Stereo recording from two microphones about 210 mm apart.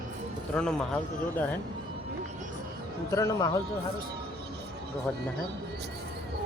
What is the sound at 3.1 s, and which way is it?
Speech, 15° left (ahead or behind).